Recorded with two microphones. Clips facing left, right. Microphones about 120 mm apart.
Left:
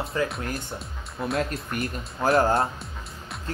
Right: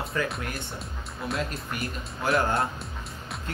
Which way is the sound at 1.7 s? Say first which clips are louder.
Left 3 dB; 45° left (ahead or behind).